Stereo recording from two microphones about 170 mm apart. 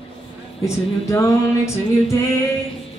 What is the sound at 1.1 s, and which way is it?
Music, 15° left (ahead or behind).